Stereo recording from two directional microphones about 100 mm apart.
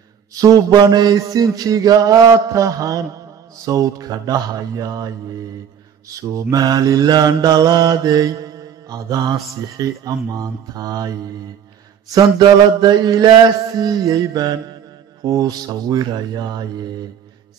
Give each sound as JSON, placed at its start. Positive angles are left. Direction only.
{"t": 0.3, "sound": "mantra", "side_deg": -40}
{"t": 12.4, "sound": "mantra", "side_deg": -45}